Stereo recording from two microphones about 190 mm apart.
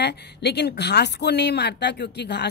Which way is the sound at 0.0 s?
60° left (ahead or behind).